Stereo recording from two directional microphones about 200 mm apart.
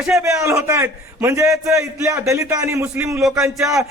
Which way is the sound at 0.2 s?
15° right (ahead or behind).